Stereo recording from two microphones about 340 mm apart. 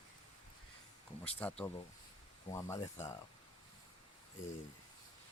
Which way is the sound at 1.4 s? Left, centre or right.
Centre.